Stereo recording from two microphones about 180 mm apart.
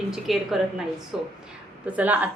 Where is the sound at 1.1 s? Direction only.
5° right (ahead or behind).